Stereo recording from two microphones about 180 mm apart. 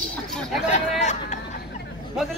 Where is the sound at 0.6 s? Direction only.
40° left (ahead or behind).